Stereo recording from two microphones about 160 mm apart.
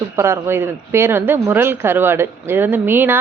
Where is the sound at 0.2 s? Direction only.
15° right (ahead or behind).